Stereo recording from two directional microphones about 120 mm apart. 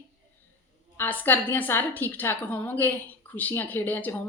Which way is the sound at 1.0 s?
15° left (ahead or behind).